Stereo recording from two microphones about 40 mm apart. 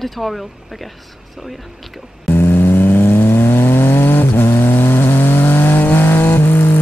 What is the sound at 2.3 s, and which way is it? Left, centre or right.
Vehicle, left.